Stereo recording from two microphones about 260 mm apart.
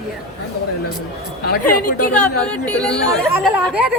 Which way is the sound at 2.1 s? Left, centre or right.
Centre.